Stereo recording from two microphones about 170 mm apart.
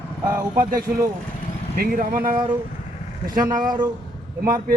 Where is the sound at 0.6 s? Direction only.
55° right (ahead or behind).